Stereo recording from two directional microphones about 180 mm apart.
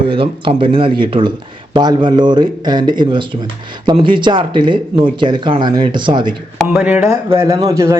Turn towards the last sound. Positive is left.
turn(degrees=-15)  # may be behind; listen again after turning